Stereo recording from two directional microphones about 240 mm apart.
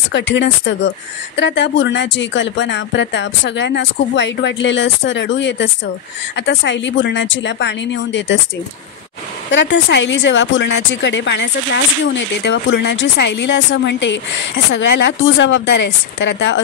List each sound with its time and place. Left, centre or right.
0.1 s speech: left
9.5 s speech: left